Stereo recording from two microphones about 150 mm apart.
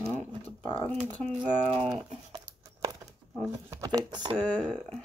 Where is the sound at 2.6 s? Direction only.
20° right (ahead or behind).